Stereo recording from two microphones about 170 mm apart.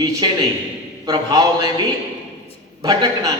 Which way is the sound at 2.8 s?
20° right (ahead or behind).